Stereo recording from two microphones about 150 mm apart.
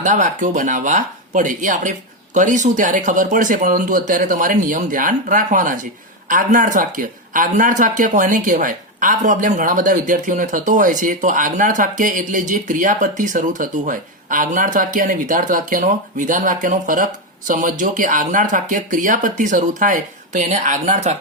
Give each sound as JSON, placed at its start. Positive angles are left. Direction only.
{"t": 0.0, "sound": "speech", "side_deg": -60}